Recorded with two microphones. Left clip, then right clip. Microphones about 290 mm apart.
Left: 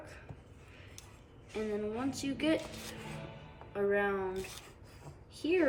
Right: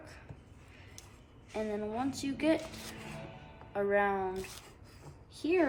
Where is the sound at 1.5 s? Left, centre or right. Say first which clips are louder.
Right 1 dB; centre.